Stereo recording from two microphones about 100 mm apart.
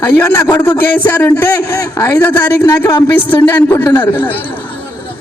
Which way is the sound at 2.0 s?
30° left (ahead or behind).